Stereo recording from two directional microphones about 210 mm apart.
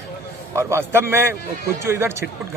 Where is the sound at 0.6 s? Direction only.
10° right (ahead or behind).